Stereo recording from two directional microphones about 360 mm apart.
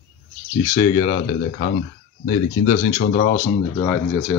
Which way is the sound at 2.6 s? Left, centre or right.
Left.